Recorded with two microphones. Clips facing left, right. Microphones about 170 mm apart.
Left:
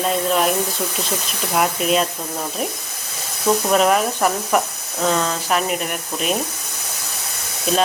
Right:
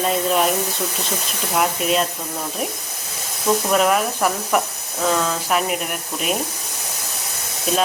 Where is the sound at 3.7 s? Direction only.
Centre (ahead or behind).